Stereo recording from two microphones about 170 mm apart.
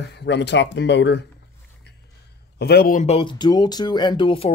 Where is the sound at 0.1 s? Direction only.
90° left.